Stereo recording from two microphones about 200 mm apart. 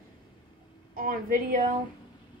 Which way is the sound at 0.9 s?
45° right (ahead or behind).